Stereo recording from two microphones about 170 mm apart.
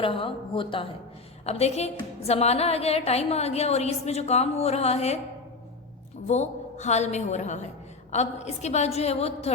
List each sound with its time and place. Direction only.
0.0 s a woman's voice: 30° left (ahead or behind)
6.2 s a woman's voice: 40° left (ahead or behind)